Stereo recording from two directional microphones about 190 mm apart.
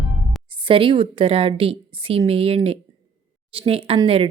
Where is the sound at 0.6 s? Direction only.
30° right (ahead or behind).